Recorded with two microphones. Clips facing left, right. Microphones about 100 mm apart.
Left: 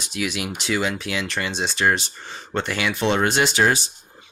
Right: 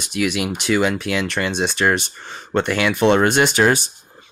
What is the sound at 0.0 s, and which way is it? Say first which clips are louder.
Speech: right 6 dB; 60° right (ahead or behind).